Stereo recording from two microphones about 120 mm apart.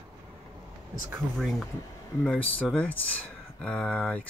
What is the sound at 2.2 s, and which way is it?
Speech, 10° left (ahead or behind).